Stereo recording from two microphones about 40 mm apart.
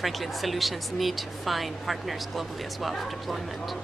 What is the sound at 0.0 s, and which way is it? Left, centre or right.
Speech, centre.